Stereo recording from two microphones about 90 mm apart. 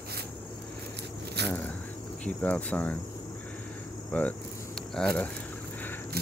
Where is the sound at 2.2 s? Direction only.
15° left (ahead or behind).